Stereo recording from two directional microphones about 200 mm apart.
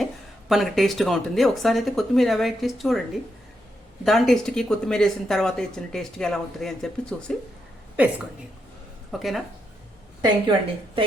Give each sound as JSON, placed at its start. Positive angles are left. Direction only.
{"t": 0.0, "sound": "speech", "side_deg": 0}
{"t": 4.0, "sound": "speech", "side_deg": 0}
{"t": 9.1, "sound": "speech", "side_deg": 0}
{"t": 10.2, "sound": "a woman's voice", "side_deg": -20}